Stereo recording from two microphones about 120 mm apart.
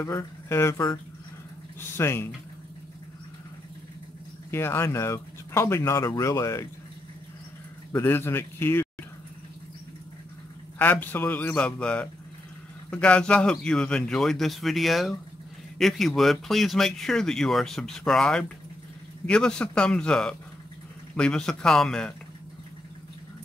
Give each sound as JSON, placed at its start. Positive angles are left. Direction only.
{"t": 0.0, "sound": "speech", "side_deg": 20}
{"t": 4.5, "sound": "speech", "side_deg": 20}
{"t": 7.9, "sound": "speech", "side_deg": 20}
{"t": 10.8, "sound": "a man's voice", "side_deg": 15}